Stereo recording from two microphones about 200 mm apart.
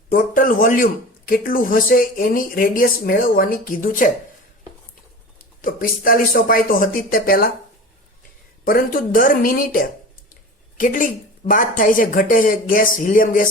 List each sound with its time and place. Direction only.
0.1 s a man's voice: 45° left (ahead or behind)
5.6 s a man's voice: 45° left (ahead or behind)
8.6 s a man's voice: 45° left (ahead or behind)